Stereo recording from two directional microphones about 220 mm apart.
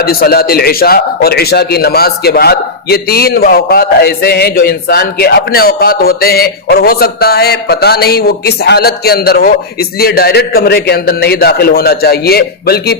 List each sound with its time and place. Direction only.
0.0 s a man's voice: 45° left (ahead or behind)